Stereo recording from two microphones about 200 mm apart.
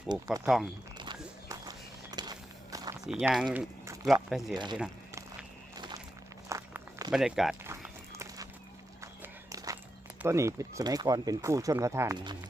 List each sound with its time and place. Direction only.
0.4 s speech: 5° right (ahead or behind)
1.5 s a sound: 20° right (ahead or behind)
2.7 s walk: 15° right (ahead or behind)
3.1 s speech: 5° right (ahead or behind)
4.5 s speech: 20° right (ahead or behind)
4.8 s a sound: 5° right (ahead or behind)
5.7 s walk: 20° right (ahead or behind)
7.1 s speech: centre (ahead or behind)
7.7 s horse: 15° right (ahead or behind)
10.2 s speech: 15° right (ahead or behind)